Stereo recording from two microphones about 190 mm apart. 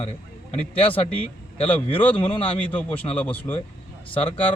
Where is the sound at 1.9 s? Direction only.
10° left (ahead or behind).